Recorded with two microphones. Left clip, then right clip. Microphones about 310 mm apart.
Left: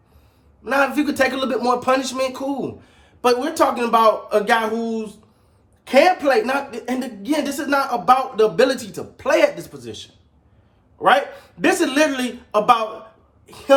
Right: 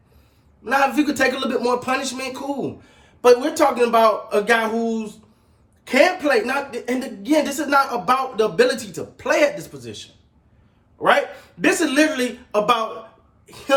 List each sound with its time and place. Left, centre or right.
0.6 s a woman's voice: centre
11.6 s a woman's voice: centre